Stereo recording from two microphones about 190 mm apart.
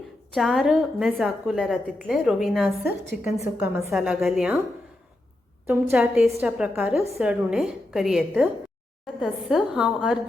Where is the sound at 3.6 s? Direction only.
15° right (ahead or behind).